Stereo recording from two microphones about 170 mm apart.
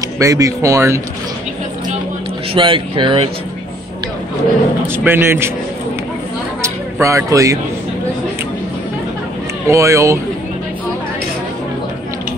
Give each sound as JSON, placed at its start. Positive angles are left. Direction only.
{"t": 0.2, "sound": "speech", "side_deg": -20}
{"t": 2.5, "sound": "speech", "side_deg": -30}
{"t": 4.8, "sound": "speech", "side_deg": -15}
{"t": 6.6, "sound": "a sound", "side_deg": -15}
{"t": 9.7, "sound": "speech", "side_deg": -15}